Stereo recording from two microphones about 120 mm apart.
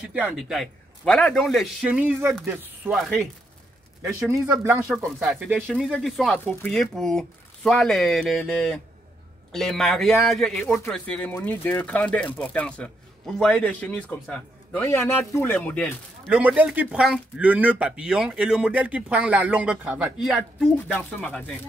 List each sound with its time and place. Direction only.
0.0 s speech: 10° right (ahead or behind)
0.6 s speech: 5° left (ahead or behind)
1.9 s speech: 15° right (ahead or behind)
2.9 s speech: centre (ahead or behind)
4.0 s speech: 25° right (ahead or behind)
4.9 s a man's voice: centre (ahead or behind)
14.9 s a man's voice: 20° left (ahead or behind)
16.3 s speech: 10° right (ahead or behind); by 21.5 s 10° left (ahead or behind)